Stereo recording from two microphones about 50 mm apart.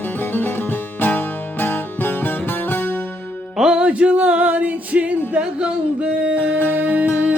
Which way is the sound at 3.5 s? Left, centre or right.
Centre.